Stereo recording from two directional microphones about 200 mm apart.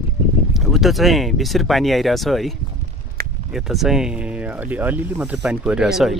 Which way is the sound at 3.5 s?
Centre (ahead or behind).